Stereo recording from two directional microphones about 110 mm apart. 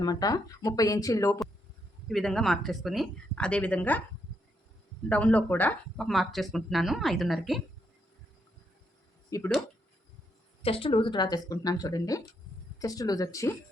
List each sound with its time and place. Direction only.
0.0 s speech: 35° left (ahead or behind)
2.0 s a woman's voice: 5° left (ahead or behind)
3.3 s speech: 10° left (ahead or behind)
5.0 s speech: 10° left (ahead or behind)
6.0 s a woman's voice: centre (ahead or behind)
9.3 s speech: 35° left (ahead or behind)
10.6 s speech: 60° left (ahead or behind); by 13.5 s 30° left (ahead or behind)